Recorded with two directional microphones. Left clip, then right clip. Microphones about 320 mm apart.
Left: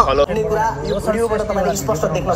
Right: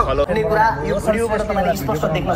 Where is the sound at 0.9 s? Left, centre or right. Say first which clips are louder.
Even; centre.